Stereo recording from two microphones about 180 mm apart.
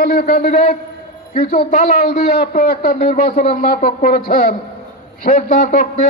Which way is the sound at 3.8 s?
50° left (ahead or behind).